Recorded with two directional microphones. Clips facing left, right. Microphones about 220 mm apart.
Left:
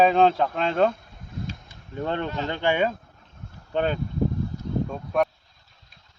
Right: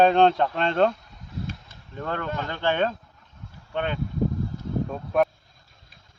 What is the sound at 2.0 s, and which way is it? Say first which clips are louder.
Speech: left 2 dB; 20° left (ahead or behind).